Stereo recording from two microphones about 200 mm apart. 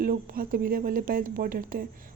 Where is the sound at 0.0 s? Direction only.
45° right (ahead or behind).